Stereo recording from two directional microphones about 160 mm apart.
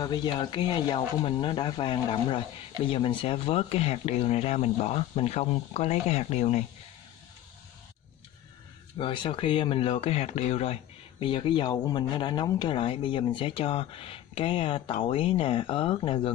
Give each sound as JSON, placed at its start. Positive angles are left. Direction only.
{"t": 0.0, "sound": "speech", "side_deg": 25}
{"t": 8.9, "sound": "speech", "side_deg": 30}